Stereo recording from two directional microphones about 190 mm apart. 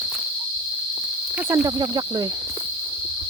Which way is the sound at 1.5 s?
20° right (ahead or behind).